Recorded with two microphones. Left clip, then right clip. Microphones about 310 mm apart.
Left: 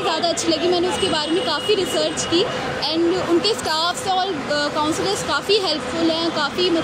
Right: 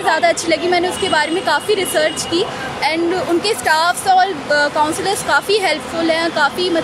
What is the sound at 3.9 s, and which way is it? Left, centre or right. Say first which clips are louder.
A woman's voice: right 7 dB; right.